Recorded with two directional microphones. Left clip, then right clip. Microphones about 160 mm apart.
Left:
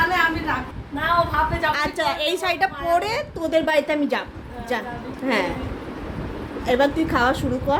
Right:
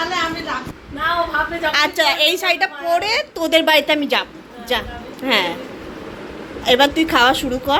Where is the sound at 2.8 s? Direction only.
15° left (ahead or behind).